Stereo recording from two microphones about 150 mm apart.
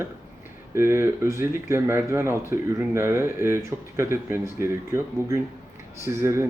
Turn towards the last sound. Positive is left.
turn(degrees=-20)  # may be behind; listen again after turning